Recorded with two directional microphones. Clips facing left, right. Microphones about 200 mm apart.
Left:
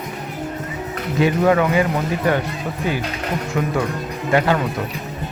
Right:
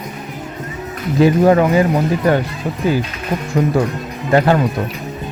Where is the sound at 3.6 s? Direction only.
35° right (ahead or behind).